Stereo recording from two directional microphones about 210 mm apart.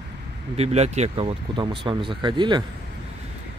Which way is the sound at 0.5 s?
30° right (ahead or behind).